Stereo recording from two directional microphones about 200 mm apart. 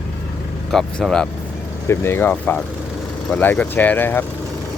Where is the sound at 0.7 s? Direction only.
Centre (ahead or behind).